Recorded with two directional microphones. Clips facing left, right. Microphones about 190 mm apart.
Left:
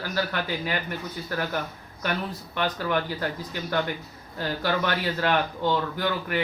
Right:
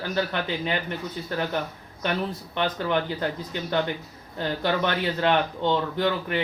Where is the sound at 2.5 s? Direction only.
25° right (ahead or behind).